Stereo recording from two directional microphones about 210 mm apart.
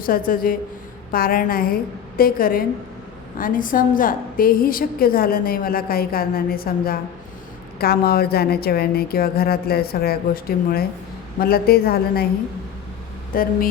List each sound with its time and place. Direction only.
0.0 s a woman's voice: 40° left (ahead or behind)
13.3 s a woman's voice: 45° left (ahead or behind)